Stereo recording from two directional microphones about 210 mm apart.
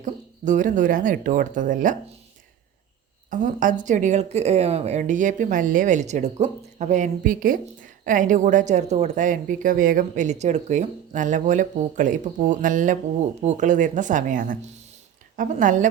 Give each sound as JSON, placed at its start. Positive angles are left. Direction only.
{"t": 0.0, "sound": "speech", "side_deg": -35}
{"t": 3.2, "sound": "speech", "side_deg": -40}